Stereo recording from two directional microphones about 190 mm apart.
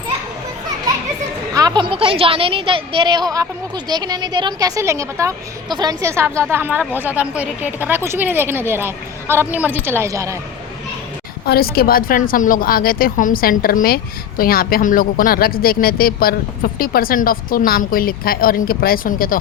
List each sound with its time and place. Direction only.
1.5 s a woman's voice: 20° right (ahead or behind)
11.4 s a woman's voice: 55° left (ahead or behind)